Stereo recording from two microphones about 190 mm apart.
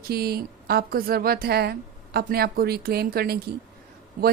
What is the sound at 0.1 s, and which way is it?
A woman's voice, 55° right (ahead or behind).